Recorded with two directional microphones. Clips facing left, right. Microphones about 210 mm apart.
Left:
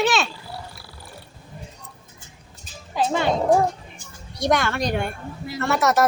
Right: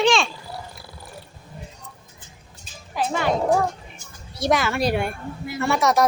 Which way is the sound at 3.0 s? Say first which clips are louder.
Left 2 dB; 25° left (ahead or behind).